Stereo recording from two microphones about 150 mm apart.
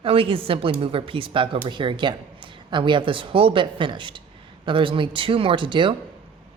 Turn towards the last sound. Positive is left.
turn(degrees=-35)  # may be behind; listen again after turning